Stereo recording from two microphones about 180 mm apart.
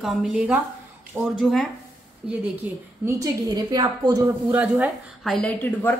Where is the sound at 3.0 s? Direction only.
20° right (ahead or behind).